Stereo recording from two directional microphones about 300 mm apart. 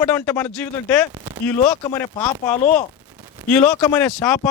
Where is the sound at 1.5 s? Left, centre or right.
Centre.